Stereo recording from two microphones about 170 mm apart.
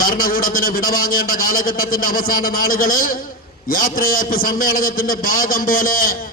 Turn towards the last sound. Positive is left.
turn(degrees=55)  # may be behind; listen again after turning